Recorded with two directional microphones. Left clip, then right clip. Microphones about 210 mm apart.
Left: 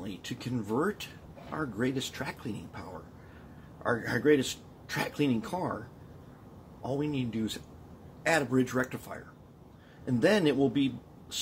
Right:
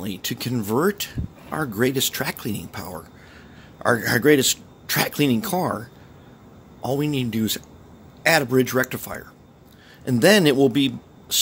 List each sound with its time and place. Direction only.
0.0 s speech: 55° right (ahead or behind)
6.8 s speech: 55° right (ahead or behind)